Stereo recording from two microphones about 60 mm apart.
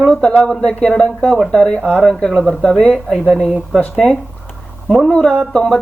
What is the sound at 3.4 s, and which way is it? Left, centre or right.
Speech, centre.